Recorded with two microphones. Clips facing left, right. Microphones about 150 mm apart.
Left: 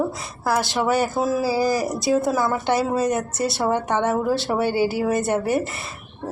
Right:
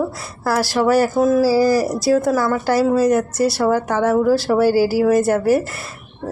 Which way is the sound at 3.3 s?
Centre (ahead or behind).